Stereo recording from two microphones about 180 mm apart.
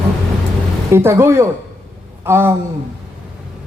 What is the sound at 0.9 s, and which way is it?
A man's voice, 15° right (ahead or behind).